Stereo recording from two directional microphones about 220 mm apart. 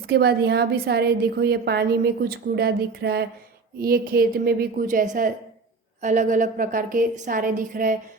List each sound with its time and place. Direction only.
0.1 s a woman's voice: 45° right (ahead or behind)